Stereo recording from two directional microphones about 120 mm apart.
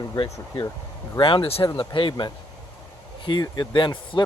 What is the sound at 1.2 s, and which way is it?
Speech, 45° left (ahead or behind).